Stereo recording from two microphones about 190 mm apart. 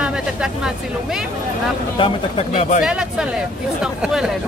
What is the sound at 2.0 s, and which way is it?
Speech, 30° left (ahead or behind).